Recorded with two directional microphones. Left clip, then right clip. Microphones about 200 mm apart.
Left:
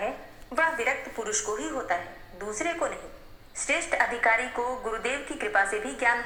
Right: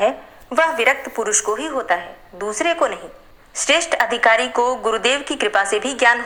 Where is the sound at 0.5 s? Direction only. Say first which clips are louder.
Right 10 dB; 40° right (ahead or behind).